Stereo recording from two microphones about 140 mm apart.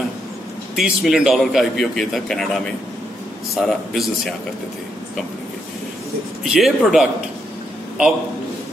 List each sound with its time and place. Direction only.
0.7 s a man's voice: 5° right (ahead or behind)
6.4 s a man's voice: centre (ahead or behind)